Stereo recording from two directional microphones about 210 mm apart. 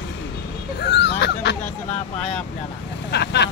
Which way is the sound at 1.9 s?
30° left (ahead or behind).